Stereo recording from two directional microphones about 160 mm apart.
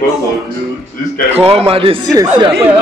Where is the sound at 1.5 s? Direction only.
35° right (ahead or behind).